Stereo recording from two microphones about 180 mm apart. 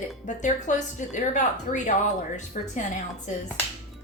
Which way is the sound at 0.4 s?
45° left (ahead or behind).